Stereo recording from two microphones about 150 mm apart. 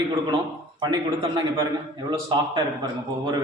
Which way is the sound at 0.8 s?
30° right (ahead or behind).